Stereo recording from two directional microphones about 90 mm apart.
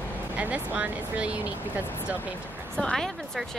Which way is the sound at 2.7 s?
5° left (ahead or behind).